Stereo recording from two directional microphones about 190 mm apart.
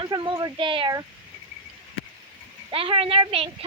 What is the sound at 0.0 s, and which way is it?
Speech, 25° right (ahead or behind).